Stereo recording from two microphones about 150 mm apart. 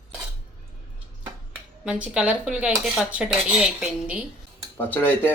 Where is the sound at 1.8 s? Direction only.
5° right (ahead or behind).